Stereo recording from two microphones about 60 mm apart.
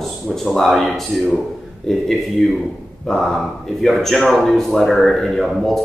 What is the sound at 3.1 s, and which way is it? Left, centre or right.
A man's voice, centre.